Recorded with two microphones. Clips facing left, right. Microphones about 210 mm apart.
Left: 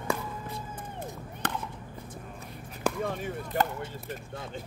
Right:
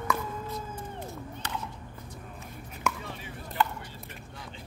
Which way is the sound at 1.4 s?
55° left (ahead or behind).